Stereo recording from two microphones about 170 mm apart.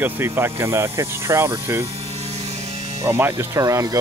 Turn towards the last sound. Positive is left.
turn(degrees=-20)  # may be behind; listen again after turning